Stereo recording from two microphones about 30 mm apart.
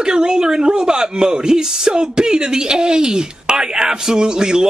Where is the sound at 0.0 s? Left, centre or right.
Right.